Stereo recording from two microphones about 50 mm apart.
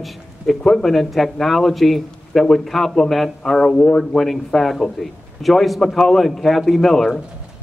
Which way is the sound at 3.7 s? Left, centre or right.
Centre.